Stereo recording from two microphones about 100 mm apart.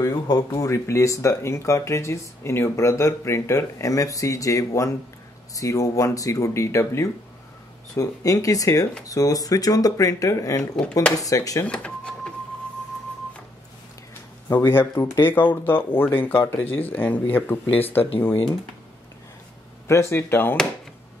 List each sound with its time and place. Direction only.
0.0 s speech: 40° left (ahead or behind)
10.8 s speech: 10° left (ahead or behind)
11.1 s speech: 35° left (ahead or behind)
11.6 s cash register: 10° left (ahead or behind)
14.5 s speech: 25° left (ahead or behind)
19.9 s speech: 25° left (ahead or behind)